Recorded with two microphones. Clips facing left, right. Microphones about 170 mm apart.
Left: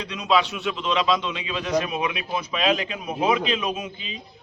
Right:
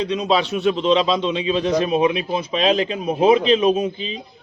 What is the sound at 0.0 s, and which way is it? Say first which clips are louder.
A man's voice: right 4 dB; 25° right (ahead or behind).